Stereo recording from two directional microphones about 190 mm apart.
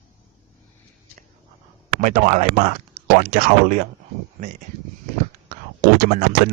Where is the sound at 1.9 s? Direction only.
45° right (ahead or behind).